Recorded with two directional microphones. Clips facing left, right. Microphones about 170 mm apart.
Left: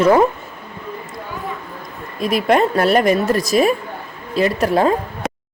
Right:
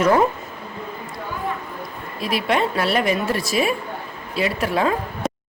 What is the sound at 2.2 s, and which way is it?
A woman's voice, 45° left (ahead or behind).